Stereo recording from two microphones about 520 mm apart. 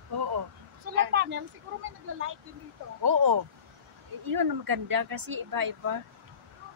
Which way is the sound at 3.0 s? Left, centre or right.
Right.